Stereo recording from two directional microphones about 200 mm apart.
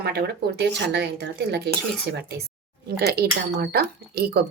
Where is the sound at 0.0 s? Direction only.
55° right (ahead or behind).